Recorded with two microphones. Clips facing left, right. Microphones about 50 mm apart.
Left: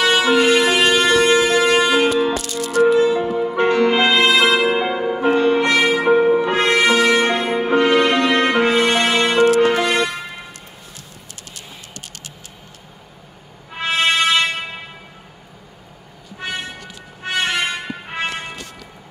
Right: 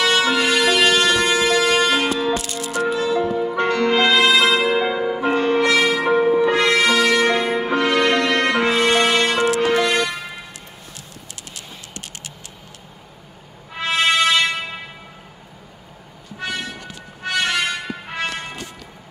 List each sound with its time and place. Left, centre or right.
0.0 s music: centre
1.7 s music: centre
2.3 s music: right
3.0 s music: left; by 5.6 s centre
5.6 s music: left
6.4 s music: left; by 9.9 s centre
13.7 s music: left
16.3 s vehicle: left
17.2 s music: left
18.1 s music: left